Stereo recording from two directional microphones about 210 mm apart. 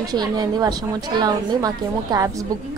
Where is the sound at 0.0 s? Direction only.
20° right (ahead or behind).